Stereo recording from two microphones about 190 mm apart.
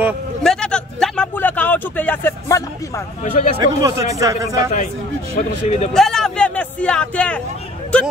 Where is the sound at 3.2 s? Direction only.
40° left (ahead or behind).